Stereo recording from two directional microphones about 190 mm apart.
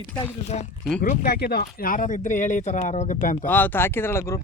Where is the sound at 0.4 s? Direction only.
35° left (ahead or behind).